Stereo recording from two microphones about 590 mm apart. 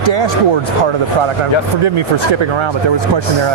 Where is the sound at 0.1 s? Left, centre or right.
Right.